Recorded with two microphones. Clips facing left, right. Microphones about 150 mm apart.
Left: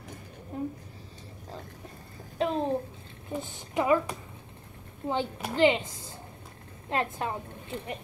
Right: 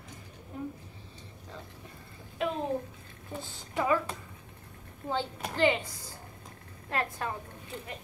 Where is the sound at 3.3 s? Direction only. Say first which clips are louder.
Left 5 dB; 20° left (ahead or behind).